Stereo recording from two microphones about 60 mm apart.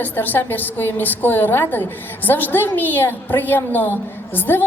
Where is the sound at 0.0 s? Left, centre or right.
Left.